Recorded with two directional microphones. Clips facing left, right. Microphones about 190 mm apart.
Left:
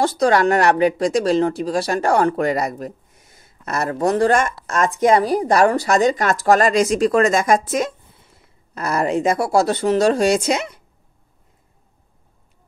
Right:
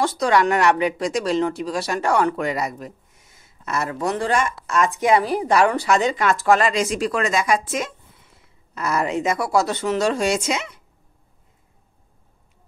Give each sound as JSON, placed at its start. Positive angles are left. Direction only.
{"t": 0.0, "sound": "speech", "side_deg": 35}